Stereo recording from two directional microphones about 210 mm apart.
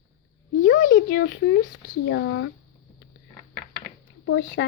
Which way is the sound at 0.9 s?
50° left (ahead or behind).